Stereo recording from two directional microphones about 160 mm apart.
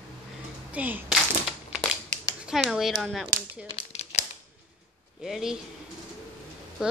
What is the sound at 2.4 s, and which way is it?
Speech, 5° right (ahead or behind).